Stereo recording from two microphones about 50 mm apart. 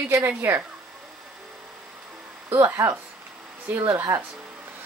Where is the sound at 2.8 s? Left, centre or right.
Right.